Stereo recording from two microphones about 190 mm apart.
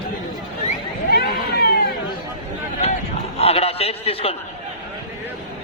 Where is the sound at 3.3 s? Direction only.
30° left (ahead or behind).